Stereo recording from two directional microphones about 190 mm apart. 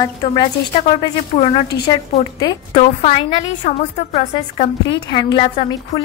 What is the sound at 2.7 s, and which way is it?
A woman's voice, 35° left (ahead or behind).